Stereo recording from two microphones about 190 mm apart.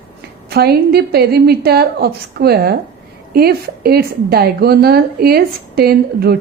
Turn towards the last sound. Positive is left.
turn(degrees=-55)  # may be behind; listen again after turning